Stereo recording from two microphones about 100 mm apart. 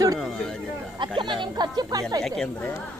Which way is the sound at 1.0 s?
55° right (ahead or behind).